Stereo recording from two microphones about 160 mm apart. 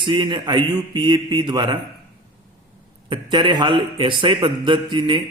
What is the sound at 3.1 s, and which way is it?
A man's voice, 30° right (ahead or behind).